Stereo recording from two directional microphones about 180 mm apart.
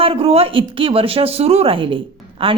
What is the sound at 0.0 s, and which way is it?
A woman's voice, 30° right (ahead or behind).